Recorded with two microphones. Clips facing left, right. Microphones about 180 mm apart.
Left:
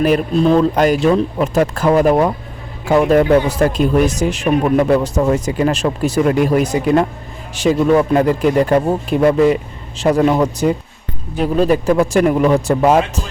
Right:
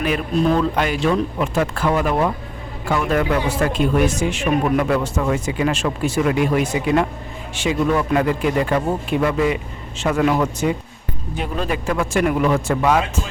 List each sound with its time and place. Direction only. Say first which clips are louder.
0.0 s speech: left 6 dB; 40° left (ahead or behind)